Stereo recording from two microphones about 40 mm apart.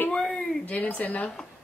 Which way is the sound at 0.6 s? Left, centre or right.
Left.